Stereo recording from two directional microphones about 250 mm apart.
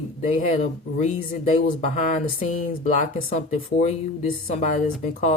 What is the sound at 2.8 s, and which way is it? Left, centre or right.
Speech, left.